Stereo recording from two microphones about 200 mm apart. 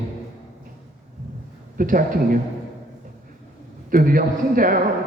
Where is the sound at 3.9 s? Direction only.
45° right (ahead or behind).